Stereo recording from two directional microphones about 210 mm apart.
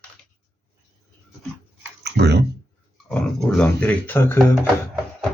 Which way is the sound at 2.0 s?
50° right (ahead or behind).